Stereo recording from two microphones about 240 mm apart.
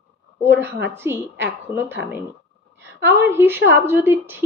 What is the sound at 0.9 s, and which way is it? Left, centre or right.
Speech, centre.